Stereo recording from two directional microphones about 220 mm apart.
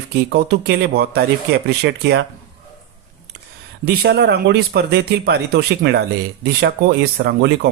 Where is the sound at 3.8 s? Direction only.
45° right (ahead or behind).